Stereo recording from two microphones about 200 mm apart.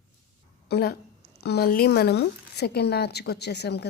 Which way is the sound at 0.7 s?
50° left (ahead or behind).